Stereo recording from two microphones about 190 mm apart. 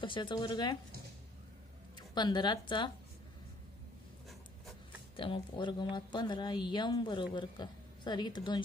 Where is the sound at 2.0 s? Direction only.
20° left (ahead or behind).